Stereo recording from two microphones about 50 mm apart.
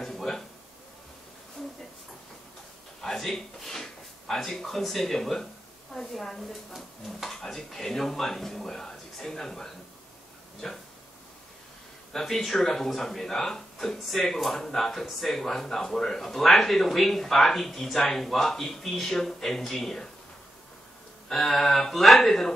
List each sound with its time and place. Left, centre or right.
0.0 s a sound: centre
3.0 s speech: centre
12.1 s speech: centre
21.3 s speech: centre